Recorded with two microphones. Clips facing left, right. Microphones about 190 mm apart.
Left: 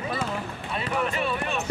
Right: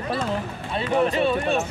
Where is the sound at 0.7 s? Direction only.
30° right (ahead or behind).